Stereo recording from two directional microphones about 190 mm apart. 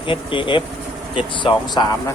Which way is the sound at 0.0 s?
25° left (ahead or behind).